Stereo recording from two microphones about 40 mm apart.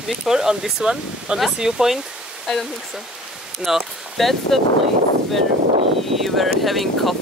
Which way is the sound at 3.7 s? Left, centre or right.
Centre.